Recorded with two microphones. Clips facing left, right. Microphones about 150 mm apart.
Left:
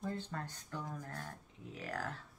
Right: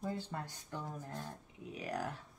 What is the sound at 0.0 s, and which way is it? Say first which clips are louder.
Speech: right 1 dB; 10° right (ahead or behind).